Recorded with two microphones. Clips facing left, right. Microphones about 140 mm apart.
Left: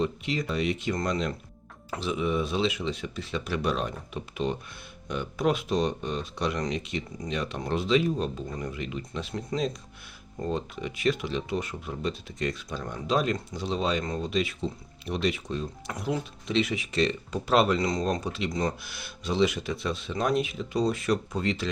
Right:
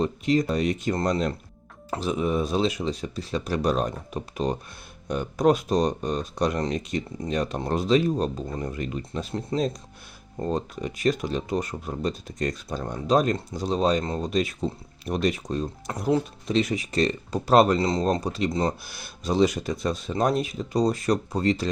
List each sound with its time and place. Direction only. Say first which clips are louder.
0.0 s speech: right 6 dB; 40° right (ahead or behind)
9.5 s speech: right 3 dB; 30° right (ahead or behind)
10.4 s speech: right 3 dB; 40° right (ahead or behind)
14.0 s speech: right 3 dB; 30° right (ahead or behind)
14.3 s speech: right 3 dB; 40° right (ahead or behind)
17.8 s speech: right 4 dB; 30° right (ahead or behind)